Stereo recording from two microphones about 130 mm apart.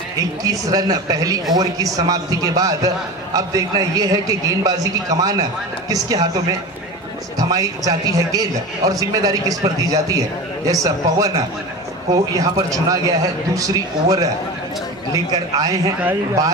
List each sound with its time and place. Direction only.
0.4 s a man's voice: 30° right (ahead or behind)
7.3 s a man's voice: 30° right (ahead or behind)